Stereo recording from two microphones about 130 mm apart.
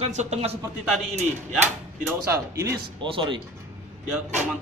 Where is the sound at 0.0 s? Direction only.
60° right (ahead or behind).